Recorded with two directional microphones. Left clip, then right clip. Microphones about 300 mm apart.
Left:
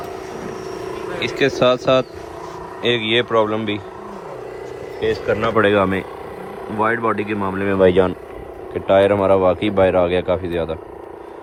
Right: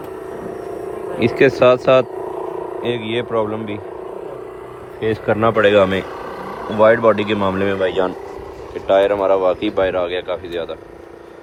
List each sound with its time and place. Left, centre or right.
1.2 s speech: centre
2.8 s speech: centre
4.9 s speech: centre
7.8 s speech: centre